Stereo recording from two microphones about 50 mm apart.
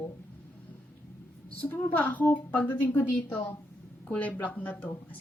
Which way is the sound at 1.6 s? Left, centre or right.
Left.